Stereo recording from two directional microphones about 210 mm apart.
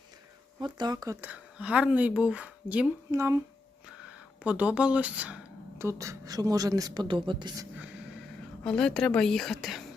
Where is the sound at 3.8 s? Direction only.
5° right (ahead or behind).